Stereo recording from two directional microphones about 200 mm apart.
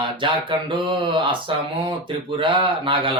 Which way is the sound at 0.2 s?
25° right (ahead or behind).